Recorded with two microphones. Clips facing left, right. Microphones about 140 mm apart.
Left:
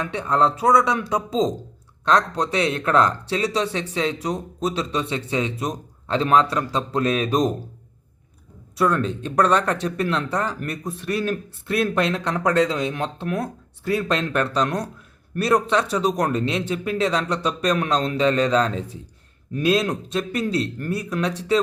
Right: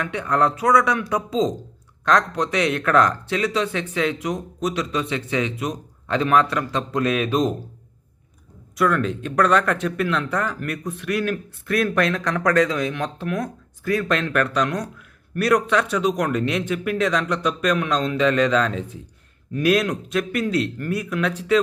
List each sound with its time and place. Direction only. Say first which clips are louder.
0.0 s speech: even; 30° left (ahead or behind)
8.7 s speech: even; 30° left (ahead or behind)